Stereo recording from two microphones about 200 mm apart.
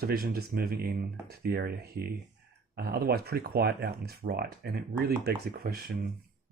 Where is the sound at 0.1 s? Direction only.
50° right (ahead or behind).